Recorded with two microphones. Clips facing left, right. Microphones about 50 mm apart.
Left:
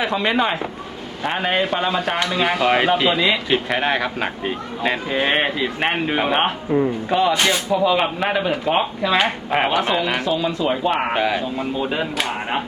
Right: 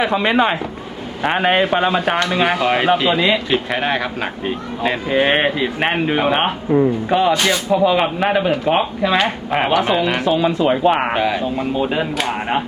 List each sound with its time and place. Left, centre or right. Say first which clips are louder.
0.0 s speech: right 4 dB; centre
1.2 s speech: right 5 dB; right
2.6 s speech: right 1 dB; centre
5.0 s speech: right 6 dB; centre
7.3 s speech: right 1 dB; centre
7.7 s speech: right 3 dB; centre
9.6 s speech: right 5 dB; centre
9.9 s speech: right 3 dB; centre
10.2 s speech: right 5 dB; right
11.1 s speech: right 2 dB; centre
11.5 s speech: right 4 dB; centre